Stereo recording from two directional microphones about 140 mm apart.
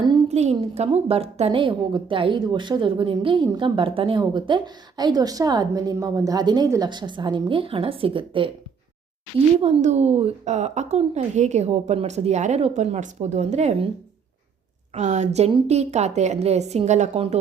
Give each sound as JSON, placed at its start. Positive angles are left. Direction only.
{"t": 0.3, "sound": "a sound", "side_deg": -50}
{"t": 0.7, "sound": "a woman's voice", "side_deg": -50}
{"t": 9.6, "sound": "a woman's voice", "side_deg": -45}
{"t": 14.9, "sound": "a woman's voice", "side_deg": -55}